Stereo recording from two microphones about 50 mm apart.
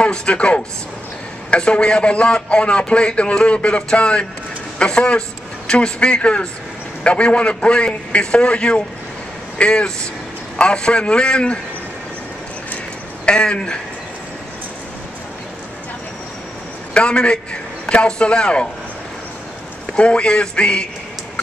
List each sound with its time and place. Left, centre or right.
0.0 s a man's voice: left
13.2 s a man's voice: centre
16.9 s a man's voice: centre
20.0 s a man's voice: left